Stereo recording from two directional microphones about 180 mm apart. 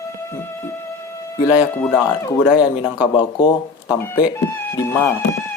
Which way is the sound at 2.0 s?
20° left (ahead or behind).